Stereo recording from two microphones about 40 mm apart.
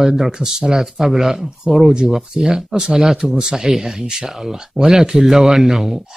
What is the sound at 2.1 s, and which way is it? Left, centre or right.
Speech, centre.